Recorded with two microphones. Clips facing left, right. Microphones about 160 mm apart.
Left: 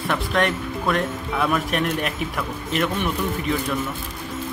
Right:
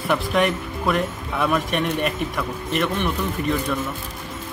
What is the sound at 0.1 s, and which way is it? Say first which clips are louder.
Speech: right 2 dB; centre (ahead or behind).